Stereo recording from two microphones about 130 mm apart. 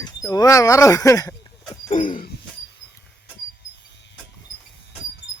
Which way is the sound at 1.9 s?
90° left.